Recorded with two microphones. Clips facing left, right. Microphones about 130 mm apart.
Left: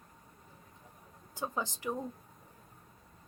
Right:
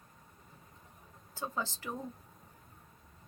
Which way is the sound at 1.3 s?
15° left (ahead or behind).